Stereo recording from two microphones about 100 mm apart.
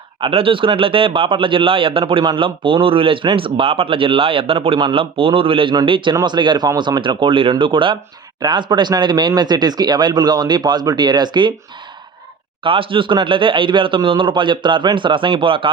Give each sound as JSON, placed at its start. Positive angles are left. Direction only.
{"t": 0.2, "sound": "speech", "side_deg": -65}
{"t": 6.2, "sound": "speech", "side_deg": -50}
{"t": 12.6, "sound": "speech", "side_deg": -60}